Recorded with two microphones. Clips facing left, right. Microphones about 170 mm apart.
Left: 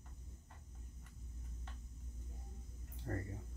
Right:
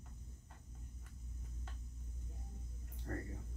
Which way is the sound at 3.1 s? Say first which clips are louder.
Left 1 dB; 30° left (ahead or behind).